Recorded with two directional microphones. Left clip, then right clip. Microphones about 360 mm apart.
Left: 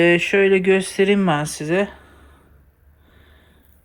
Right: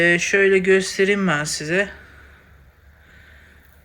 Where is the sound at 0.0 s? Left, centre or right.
Centre.